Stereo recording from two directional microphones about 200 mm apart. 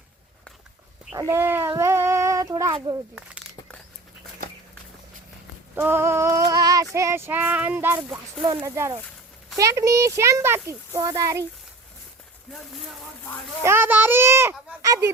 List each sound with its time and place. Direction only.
1.1 s child singing: 15° right (ahead or behind)
5.7 s female singing: 10° right (ahead or behind)
6.9 s a child's voice: 15° right (ahead or behind)
13.7 s a child's voice: 10° right (ahead or behind)
14.8 s a sound: 15° right (ahead or behind)